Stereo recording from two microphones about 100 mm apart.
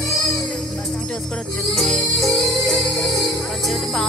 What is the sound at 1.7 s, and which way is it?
Music, centre (ahead or behind).